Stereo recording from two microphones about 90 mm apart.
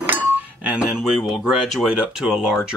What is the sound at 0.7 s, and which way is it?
Speech, 10° right (ahead or behind).